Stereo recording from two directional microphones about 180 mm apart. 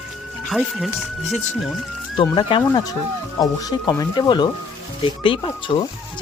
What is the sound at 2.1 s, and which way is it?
Speech, 25° left (ahead or behind).